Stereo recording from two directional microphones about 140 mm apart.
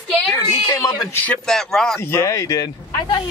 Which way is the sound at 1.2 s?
5° left (ahead or behind).